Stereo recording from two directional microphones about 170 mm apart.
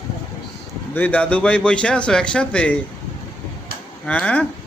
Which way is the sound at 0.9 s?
10° left (ahead or behind).